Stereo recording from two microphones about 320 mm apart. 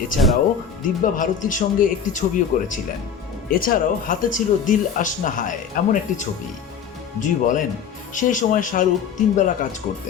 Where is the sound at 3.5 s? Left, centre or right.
Left.